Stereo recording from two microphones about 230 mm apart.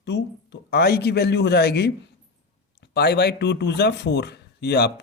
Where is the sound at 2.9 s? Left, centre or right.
Left.